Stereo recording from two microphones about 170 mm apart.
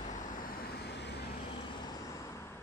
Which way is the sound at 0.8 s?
85° left.